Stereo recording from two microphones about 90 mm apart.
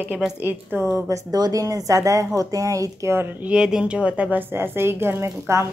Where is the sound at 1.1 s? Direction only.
45° right (ahead or behind).